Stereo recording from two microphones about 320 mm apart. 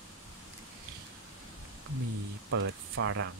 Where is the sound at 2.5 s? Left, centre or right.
Right.